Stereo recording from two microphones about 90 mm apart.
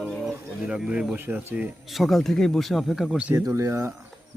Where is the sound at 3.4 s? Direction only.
35° right (ahead or behind).